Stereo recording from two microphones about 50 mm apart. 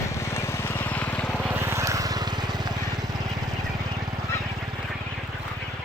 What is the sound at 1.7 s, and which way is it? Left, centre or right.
Vehicle, right.